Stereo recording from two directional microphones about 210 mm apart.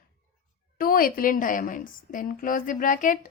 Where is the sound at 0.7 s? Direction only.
45° left (ahead or behind).